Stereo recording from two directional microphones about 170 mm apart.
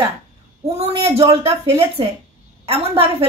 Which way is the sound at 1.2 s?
15° right (ahead or behind).